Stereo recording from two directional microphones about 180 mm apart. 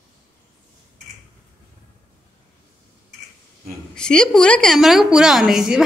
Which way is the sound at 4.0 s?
5° left (ahead or behind).